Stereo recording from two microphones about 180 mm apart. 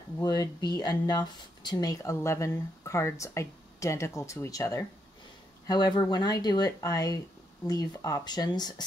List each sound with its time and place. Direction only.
0.2 s speech: 20° left (ahead or behind)